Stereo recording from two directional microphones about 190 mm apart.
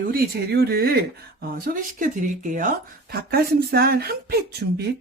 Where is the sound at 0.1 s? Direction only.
55° right (ahead or behind).